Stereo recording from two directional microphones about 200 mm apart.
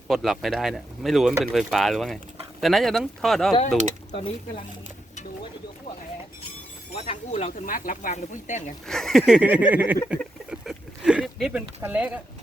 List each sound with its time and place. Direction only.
0.1 s speech: centre (ahead or behind)
6.9 s speech: 30° left (ahead or behind)
8.9 s a sound: centre (ahead or behind)